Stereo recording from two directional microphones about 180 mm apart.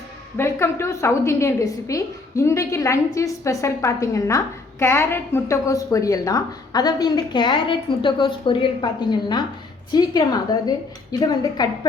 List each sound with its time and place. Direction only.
0.3 s a woman's voice: 15° left (ahead or behind)